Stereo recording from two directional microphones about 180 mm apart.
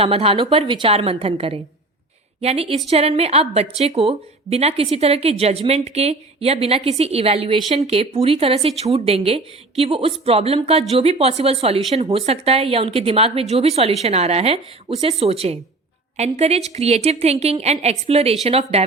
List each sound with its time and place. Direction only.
0.0 s a woman's voice: 30° right (ahead or behind)